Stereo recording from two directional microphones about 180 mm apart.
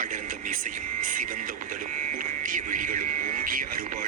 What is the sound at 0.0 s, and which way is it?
Speech, 45° right (ahead or behind).